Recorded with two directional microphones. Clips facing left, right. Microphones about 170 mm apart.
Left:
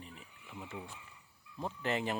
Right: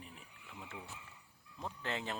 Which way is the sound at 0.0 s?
Centre (ahead or behind).